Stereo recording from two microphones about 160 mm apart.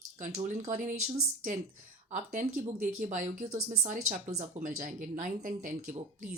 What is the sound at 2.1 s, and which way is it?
Speech, 50° right (ahead or behind).